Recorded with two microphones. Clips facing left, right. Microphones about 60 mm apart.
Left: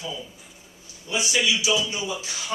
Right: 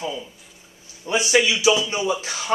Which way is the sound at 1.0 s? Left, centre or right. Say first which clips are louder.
Right 5 dB; right.